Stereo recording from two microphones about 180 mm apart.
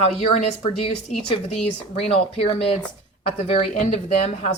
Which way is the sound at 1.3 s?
30° left (ahead or behind).